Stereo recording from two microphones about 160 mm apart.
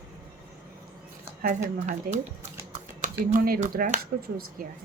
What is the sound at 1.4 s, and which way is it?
Speech, 55° right (ahead or behind).